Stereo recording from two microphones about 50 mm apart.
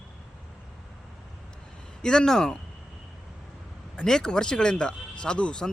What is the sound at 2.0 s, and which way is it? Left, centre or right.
Speech, centre.